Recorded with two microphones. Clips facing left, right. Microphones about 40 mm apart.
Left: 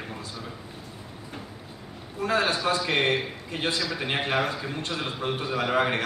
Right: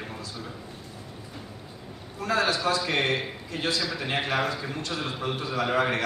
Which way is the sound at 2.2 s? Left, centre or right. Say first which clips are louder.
Even; left.